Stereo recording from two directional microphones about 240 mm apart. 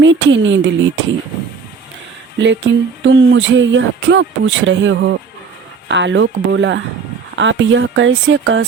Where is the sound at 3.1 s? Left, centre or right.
Right.